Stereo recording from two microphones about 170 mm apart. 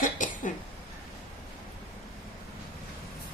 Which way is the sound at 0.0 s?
50° left (ahead or behind).